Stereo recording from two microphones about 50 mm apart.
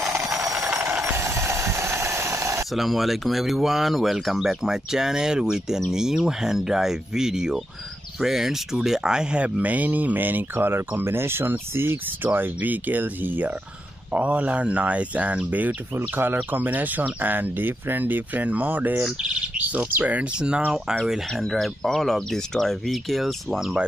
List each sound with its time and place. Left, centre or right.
1.0 s a sound: right
2.7 s speech: centre; by 13.5 s right
14.1 s speech: right
19.2 s bird: centre
19.9 s speech: right
20.3 s speech: centre
21.4 s speech: centre